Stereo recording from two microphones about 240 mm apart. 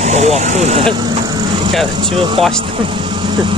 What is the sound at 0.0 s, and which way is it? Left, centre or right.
Speech, right.